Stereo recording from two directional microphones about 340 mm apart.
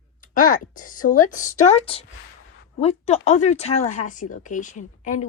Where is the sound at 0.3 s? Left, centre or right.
Left.